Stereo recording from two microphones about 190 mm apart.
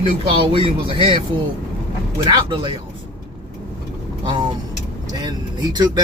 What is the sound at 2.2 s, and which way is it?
Speech, 25° right (ahead or behind).